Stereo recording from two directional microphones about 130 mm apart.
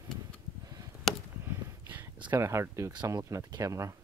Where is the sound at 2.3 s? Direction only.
20° right (ahead or behind).